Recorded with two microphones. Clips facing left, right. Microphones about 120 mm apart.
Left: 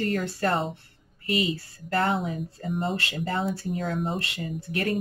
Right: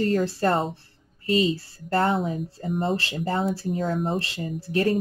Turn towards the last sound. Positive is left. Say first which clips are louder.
# right 5 dB
turn(degrees=-30)  # may be behind; listen again after turning